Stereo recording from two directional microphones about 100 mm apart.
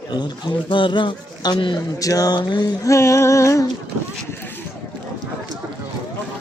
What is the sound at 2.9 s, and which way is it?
Female singing, 30° left (ahead or behind).